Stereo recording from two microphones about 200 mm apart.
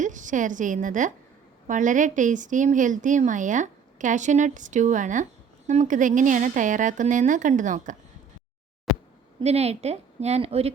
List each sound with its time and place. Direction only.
0.0 s a woman's voice: 40° right (ahead or behind)
9.4 s a woman's voice: 30° right (ahead or behind)